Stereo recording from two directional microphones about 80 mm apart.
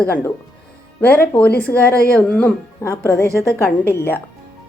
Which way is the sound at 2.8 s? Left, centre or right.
Left.